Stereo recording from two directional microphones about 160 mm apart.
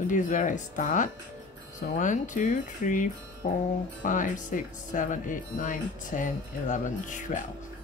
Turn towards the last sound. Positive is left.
turn(degrees=50)  # may be behind; listen again after turning